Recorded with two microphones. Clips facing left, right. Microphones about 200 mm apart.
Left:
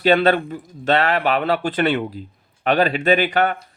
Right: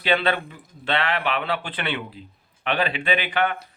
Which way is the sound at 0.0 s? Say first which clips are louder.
Left 7 dB; 45° left (ahead or behind).